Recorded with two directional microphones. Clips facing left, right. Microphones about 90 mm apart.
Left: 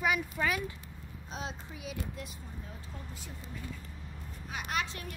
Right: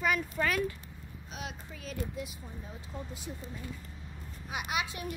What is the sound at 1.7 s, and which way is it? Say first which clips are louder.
Speech: left 1 dB; 10° left (ahead or behind).